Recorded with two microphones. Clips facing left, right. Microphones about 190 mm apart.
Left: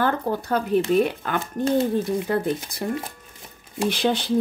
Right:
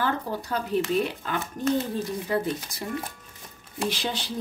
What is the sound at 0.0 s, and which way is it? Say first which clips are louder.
A woman's voice: left 5 dB; 55° left (ahead or behind).